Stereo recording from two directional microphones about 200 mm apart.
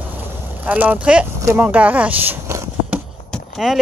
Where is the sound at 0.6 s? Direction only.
10° right (ahead or behind).